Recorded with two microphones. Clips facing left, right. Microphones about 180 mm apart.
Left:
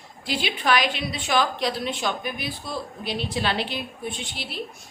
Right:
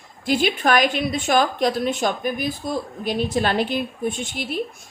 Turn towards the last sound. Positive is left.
turn(degrees=-50)  # may be behind; listen again after turning